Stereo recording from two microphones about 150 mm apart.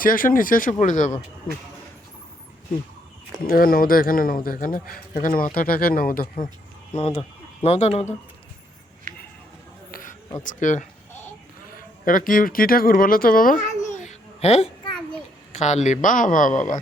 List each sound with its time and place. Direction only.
0.0 s speech: 65° left (ahead or behind)
3.4 s a man's voice: 75° left (ahead or behind)
6.9 s speech: 40° left (ahead or behind)
9.1 s a sound: 65° right (ahead or behind)
9.9 s a sound: 65° left (ahead or behind)
10.4 s speech: 60° left (ahead or behind)
12.0 s a man's voice: 65° left (ahead or behind)
14.0 s babbling: 50° left (ahead or behind)
15.5 s speech: 50° left (ahead or behind)